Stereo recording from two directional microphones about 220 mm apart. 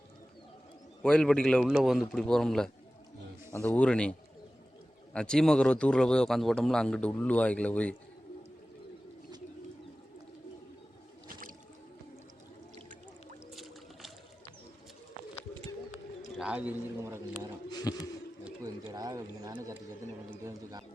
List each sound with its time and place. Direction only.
1.0 s a man's voice: 5° left (ahead or behind)
5.1 s a man's voice: 5° left (ahead or behind)
13.5 s boat: centre (ahead or behind)
16.4 s a man's voice: 5° right (ahead or behind)
17.7 s speech: 20° left (ahead or behind)
18.6 s a man's voice: 15° right (ahead or behind)